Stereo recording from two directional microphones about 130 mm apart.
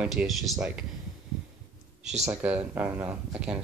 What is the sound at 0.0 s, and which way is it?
Speech, 5° right (ahead or behind).